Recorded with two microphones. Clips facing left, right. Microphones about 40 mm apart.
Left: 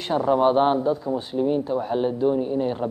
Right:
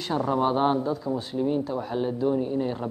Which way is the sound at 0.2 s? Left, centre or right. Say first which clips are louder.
Left 5 dB; left.